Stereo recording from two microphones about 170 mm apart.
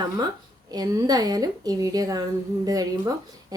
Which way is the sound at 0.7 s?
25° right (ahead or behind).